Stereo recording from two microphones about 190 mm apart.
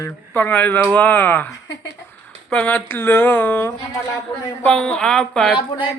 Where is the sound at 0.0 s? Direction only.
10° left (ahead or behind).